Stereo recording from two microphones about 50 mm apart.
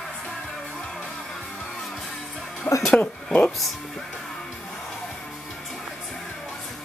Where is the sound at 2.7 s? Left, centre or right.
Left.